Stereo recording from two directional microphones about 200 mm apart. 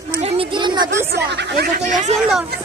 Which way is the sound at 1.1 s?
55° right (ahead or behind).